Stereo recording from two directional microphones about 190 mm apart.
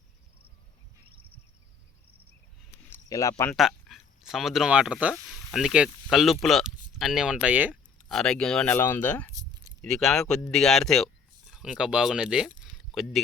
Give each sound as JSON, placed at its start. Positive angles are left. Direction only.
{"t": 2.9, "sound": "speech", "side_deg": 15}
{"t": 3.5, "sound": "speech", "side_deg": 0}
{"t": 8.0, "sound": "speech", "side_deg": 5}